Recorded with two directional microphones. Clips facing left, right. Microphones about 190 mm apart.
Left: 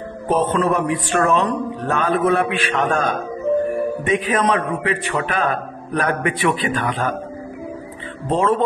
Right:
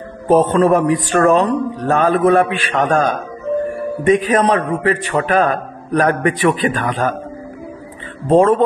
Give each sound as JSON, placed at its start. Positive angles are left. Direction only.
{"t": 0.3, "sound": "a man's voice", "side_deg": -40}
{"t": 8.3, "sound": "a man's voice", "side_deg": -45}